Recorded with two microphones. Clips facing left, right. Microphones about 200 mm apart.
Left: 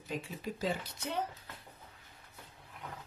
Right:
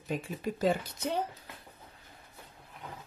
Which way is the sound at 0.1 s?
55° right (ahead or behind).